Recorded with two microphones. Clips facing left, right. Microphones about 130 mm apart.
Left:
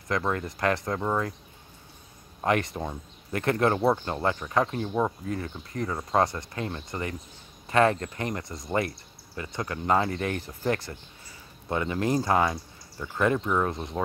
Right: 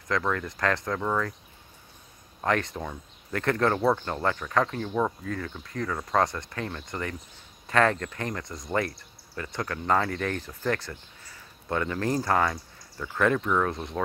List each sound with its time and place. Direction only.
0.1 s speech: 20° left (ahead or behind)
2.4 s speech: 15° left (ahead or behind)
11.7 s speech: 15° left (ahead or behind)